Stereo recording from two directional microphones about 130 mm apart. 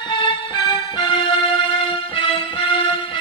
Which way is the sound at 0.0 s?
35° left (ahead or behind).